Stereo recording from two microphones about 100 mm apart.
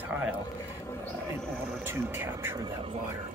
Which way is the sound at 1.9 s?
20° right (ahead or behind).